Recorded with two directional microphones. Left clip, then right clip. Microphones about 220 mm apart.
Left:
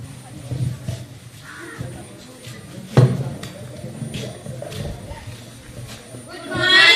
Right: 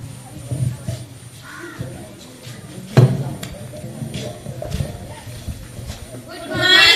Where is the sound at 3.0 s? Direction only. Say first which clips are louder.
Right 1 dB; 45° right (ahead or behind).